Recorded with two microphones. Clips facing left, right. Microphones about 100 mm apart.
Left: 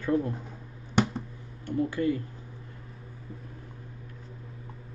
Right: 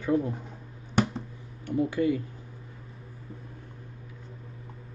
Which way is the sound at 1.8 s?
20° right (ahead or behind).